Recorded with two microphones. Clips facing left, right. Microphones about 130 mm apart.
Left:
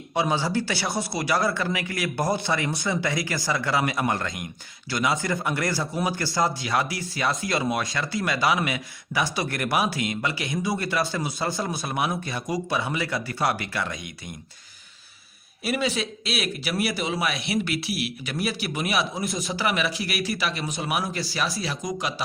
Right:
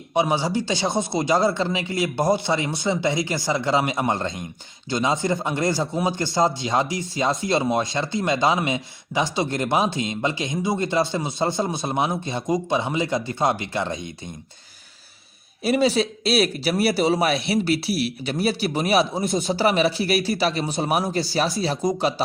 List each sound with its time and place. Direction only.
0.1 s speech: 15° right (ahead or behind)
15.6 s a man's voice: 30° right (ahead or behind)